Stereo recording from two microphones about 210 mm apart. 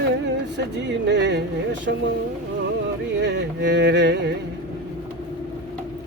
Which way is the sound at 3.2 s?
55° right (ahead or behind).